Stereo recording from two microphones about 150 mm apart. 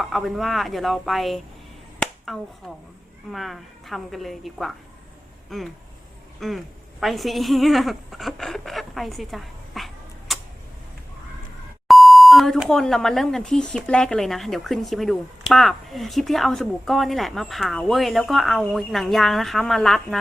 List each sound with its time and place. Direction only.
0.0 s speech: centre (ahead or behind)
2.0 s a sound: centre (ahead or behind)
3.3 s a woman's voice: centre (ahead or behind)
11.9 s speech: centre (ahead or behind)